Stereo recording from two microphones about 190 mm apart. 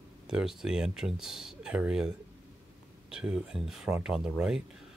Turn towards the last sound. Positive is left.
turn(degrees=-5)  # may be behind; listen again after turning